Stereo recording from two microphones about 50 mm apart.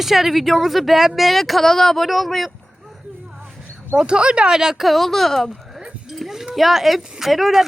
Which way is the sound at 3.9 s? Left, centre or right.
Centre.